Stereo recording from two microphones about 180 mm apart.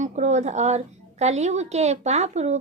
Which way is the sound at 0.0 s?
40° right (ahead or behind).